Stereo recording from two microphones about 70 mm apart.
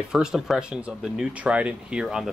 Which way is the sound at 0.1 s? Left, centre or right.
Centre.